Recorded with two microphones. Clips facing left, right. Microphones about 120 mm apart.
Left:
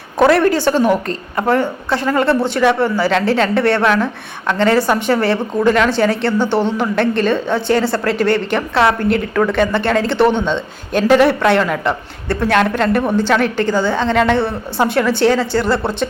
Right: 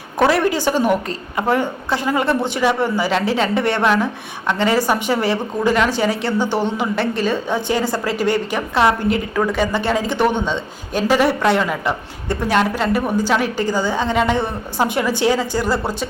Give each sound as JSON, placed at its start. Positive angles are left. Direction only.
{"t": 0.3, "sound": "speech", "side_deg": -15}
{"t": 9.0, "sound": "a woman's voice", "side_deg": 60}
{"t": 9.3, "sound": "speech", "side_deg": -10}